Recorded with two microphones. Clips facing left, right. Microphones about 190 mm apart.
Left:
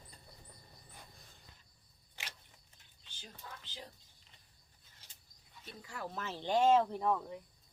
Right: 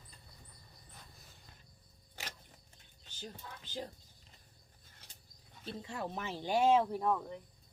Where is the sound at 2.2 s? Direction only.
40° right (ahead or behind).